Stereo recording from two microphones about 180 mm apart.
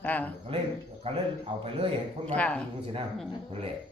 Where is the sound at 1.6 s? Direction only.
30° right (ahead or behind).